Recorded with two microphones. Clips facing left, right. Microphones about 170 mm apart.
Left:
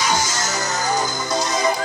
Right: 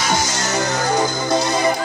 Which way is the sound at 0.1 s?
60° right (ahead or behind).